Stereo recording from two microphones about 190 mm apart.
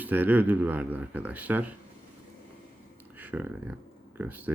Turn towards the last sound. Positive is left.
turn(degrees=-10)  # may be behind; listen again after turning